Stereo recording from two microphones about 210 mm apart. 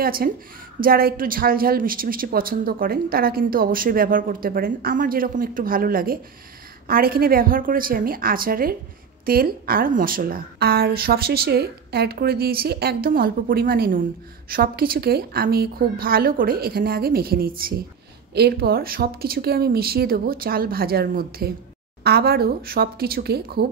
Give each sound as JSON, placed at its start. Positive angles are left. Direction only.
{"t": 0.0, "sound": "a woman's voice", "side_deg": -45}